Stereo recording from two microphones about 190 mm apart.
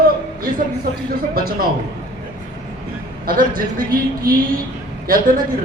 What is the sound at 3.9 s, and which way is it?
Speech, 50° right (ahead or behind).